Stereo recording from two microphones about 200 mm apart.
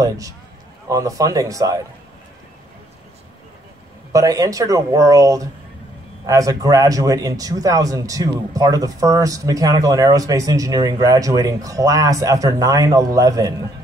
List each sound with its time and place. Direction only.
0.8 s a man's voice: 15° right (ahead or behind)
4.1 s a man's voice: 15° right (ahead or behind)